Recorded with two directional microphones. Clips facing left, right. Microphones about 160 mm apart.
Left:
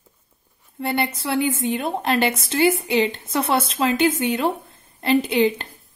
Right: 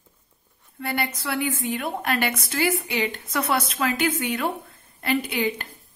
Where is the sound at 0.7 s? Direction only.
25° left (ahead or behind).